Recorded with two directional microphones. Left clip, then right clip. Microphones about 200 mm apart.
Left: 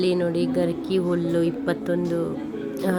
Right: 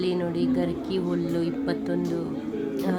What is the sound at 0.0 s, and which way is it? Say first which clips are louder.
A woman's voice: left 4 dB; 10° left (ahead or behind).